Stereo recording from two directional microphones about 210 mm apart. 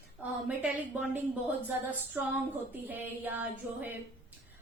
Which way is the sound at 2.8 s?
10° right (ahead or behind).